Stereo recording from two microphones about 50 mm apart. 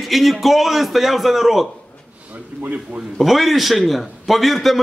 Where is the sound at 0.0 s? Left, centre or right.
Centre.